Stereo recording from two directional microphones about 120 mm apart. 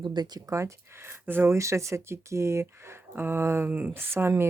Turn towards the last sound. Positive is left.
turn(degrees=-20)  # may be behind; listen again after turning